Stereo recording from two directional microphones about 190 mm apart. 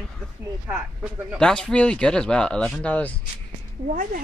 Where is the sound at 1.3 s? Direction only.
5° left (ahead or behind).